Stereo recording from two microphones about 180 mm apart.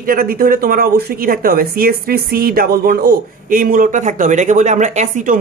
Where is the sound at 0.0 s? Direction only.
50° right (ahead or behind).